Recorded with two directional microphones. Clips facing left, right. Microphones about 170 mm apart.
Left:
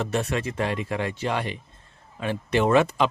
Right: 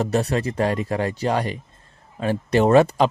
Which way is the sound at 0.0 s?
35° right (ahead or behind).